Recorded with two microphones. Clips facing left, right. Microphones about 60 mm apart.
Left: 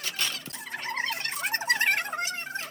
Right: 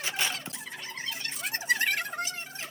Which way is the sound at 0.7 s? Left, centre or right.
Left.